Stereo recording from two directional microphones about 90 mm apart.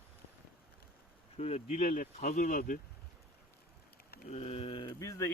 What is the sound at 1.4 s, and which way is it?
Speech, 90° left.